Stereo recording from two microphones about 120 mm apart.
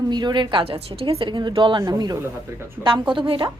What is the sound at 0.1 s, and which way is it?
A woman's voice, 35° right (ahead or behind).